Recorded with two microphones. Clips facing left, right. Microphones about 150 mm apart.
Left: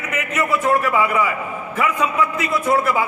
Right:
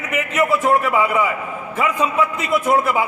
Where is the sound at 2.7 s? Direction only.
20° right (ahead or behind).